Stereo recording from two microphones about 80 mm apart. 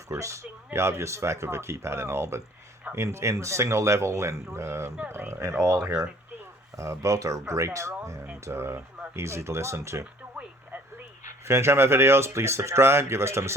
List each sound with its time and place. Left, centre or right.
0.1 s speech: right
11.4 s speech: right